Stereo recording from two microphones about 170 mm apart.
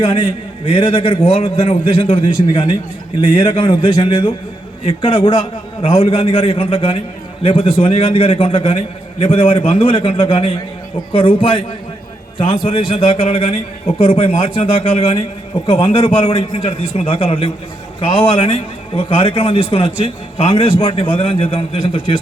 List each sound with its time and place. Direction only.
0.0 s a man's voice: 30° left (ahead or behind)
12.4 s a man's voice: 35° left (ahead or behind)